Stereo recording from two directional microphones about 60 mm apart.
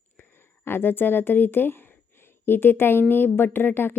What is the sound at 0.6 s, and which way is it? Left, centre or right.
A woman's voice, left.